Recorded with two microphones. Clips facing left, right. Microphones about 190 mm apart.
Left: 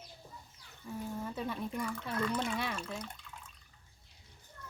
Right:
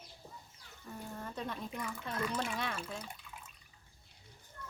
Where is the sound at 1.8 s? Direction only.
5° right (ahead or behind).